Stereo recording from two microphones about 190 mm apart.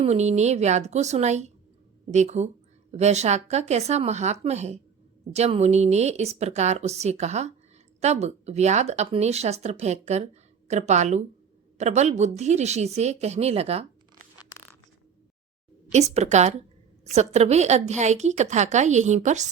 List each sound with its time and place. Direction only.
0.0 s a woman's voice: 35° right (ahead or behind)
15.9 s a woman's voice: 35° right (ahead or behind)